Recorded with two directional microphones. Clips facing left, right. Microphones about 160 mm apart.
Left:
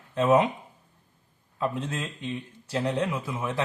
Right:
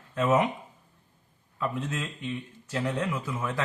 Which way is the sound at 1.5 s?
30° left (ahead or behind).